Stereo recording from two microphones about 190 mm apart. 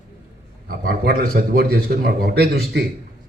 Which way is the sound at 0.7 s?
50° right (ahead or behind).